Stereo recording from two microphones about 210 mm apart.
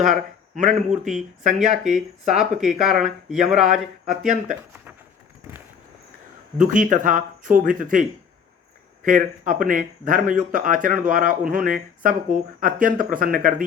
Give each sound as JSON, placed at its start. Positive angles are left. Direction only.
{"t": 0.1, "sound": "a man's voice", "side_deg": -35}
{"t": 1.0, "sound": "speech", "side_deg": 0}
{"t": 6.6, "sound": "speech", "side_deg": -40}
{"t": 9.0, "sound": "speech", "side_deg": -40}